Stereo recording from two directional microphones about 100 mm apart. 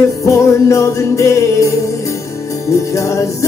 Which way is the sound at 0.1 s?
30° left (ahead or behind).